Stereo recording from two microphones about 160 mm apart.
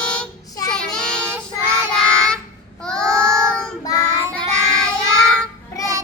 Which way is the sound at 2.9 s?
5° left (ahead or behind).